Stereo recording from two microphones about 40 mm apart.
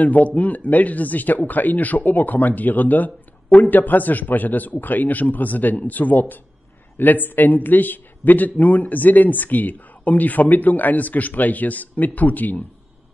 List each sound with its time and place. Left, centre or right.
0.0 s speech: left